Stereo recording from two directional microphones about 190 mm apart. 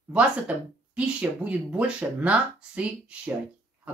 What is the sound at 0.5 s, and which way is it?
Speech, 5° right (ahead or behind).